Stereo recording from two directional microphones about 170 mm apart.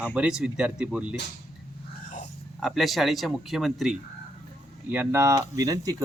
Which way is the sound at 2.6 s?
Centre (ahead or behind).